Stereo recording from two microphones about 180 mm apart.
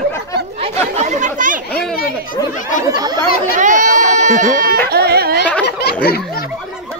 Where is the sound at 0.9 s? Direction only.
40° right (ahead or behind).